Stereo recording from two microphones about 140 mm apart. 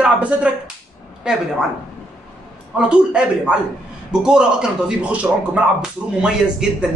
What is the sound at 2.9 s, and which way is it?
A man's voice, 5° right (ahead or behind).